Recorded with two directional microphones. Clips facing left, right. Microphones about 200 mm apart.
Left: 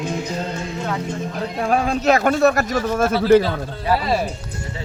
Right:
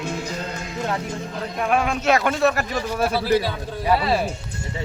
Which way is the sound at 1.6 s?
35° left (ahead or behind).